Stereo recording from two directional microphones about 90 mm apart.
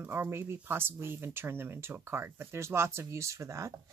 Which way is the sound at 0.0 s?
20° right (ahead or behind).